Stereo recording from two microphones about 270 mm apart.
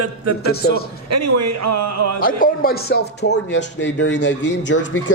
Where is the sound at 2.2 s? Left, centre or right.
Left.